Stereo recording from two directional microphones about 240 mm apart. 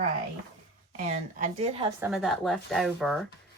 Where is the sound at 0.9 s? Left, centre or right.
Right.